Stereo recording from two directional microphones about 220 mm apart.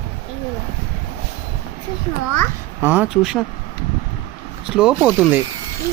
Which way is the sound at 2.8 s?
10° right (ahead or behind).